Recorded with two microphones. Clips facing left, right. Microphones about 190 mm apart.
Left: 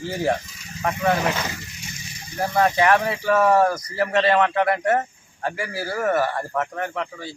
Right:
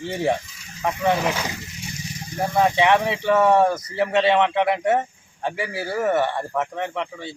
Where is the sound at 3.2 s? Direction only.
20° right (ahead or behind).